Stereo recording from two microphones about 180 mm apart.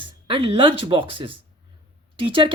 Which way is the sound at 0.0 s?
25° right (ahead or behind).